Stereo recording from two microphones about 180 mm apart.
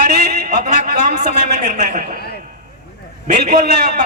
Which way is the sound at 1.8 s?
45° right (ahead or behind).